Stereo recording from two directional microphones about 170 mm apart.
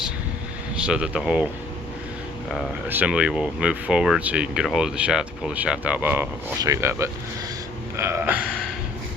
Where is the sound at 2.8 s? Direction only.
10° right (ahead or behind).